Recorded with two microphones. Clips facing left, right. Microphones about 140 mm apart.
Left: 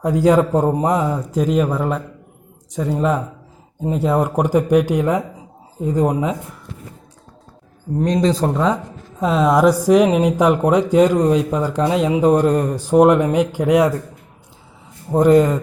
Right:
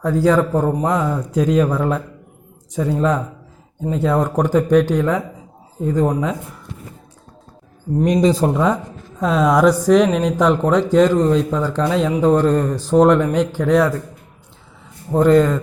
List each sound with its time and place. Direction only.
0.0 s speech: 15° left (ahead or behind)
8.0 s speech: 10° right (ahead or behind); by 13.9 s 15° left (ahead or behind)
15.1 s speech: 10° left (ahead or behind)